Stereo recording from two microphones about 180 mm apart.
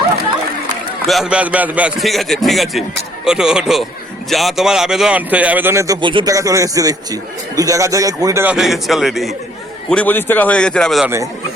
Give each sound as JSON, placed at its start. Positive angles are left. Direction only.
{"t": 1.0, "sound": "a man's voice", "side_deg": 0}
{"t": 8.5, "sound": "a man's voice", "side_deg": 0}